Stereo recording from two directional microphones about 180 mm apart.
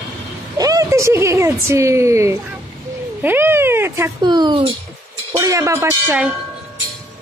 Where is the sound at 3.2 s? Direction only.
10° right (ahead or behind).